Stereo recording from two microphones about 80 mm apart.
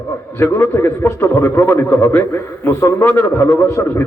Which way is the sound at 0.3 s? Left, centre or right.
Left.